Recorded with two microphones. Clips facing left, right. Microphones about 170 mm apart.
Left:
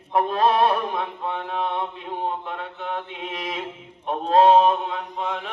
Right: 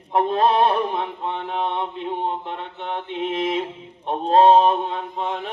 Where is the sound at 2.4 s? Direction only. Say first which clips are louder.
Right 1 dB; 25° right (ahead or behind).